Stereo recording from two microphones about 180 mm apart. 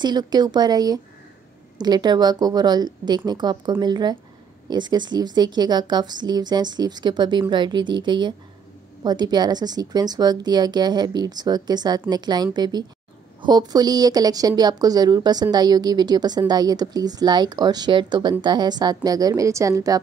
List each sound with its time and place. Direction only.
0.0 s speech: 25° right (ahead or behind)